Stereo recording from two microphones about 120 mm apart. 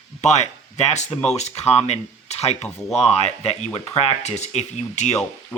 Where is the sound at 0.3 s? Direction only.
70° left (ahead or behind).